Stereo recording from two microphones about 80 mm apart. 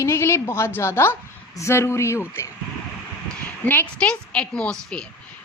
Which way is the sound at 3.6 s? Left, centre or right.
Left.